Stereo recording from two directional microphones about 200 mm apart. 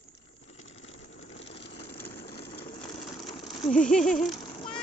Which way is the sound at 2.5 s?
25° left (ahead or behind).